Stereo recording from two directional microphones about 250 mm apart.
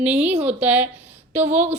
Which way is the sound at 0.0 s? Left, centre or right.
Centre.